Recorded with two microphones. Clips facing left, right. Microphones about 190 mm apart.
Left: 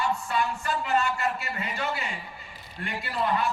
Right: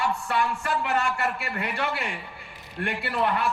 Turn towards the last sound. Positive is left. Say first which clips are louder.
# right 2 dB
turn(degrees=-65)  # may be behind; listen again after turning